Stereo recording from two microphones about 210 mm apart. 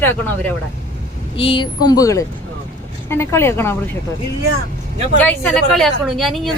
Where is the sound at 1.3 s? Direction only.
25° left (ahead or behind).